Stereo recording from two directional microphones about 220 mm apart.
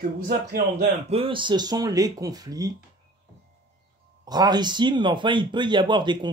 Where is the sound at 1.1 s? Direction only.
25° right (ahead or behind).